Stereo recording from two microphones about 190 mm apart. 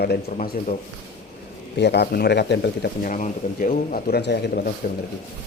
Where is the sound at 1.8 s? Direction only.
60° left (ahead or behind).